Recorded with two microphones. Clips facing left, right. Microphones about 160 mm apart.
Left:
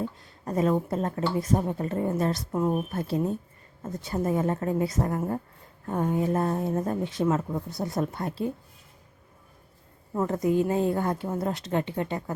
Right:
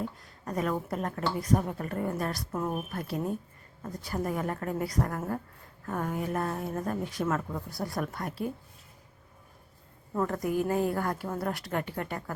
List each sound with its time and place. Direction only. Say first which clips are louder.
0.4 s a woman's voice: left 6 dB; 25° left (ahead or behind)
10.2 s a woman's voice: left 4 dB; 20° left (ahead or behind)